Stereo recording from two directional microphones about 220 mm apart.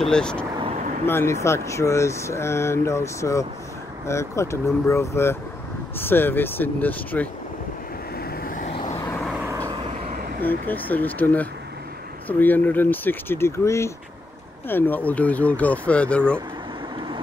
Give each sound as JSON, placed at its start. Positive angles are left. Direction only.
{"t": 0.0, "sound": "speech", "side_deg": 5}
{"t": 0.6, "sound": "vehicle", "side_deg": -30}
{"t": 1.0, "sound": "speech", "side_deg": 10}
{"t": 8.2, "sound": "vehicle", "side_deg": 45}
{"t": 10.7, "sound": "speech", "side_deg": 10}